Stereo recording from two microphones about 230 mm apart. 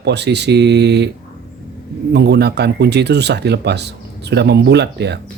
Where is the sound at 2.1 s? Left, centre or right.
Right.